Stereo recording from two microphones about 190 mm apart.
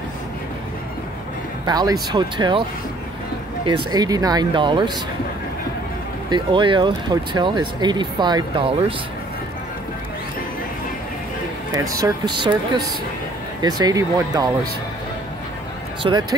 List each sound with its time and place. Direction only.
1.7 s speech: 20° right (ahead or behind)
3.6 s speech: 20° right (ahead or behind)
6.3 s speech: 25° right (ahead or behind)
11.7 s speech: 20° right (ahead or behind)
16.0 s speech: 25° right (ahead or behind)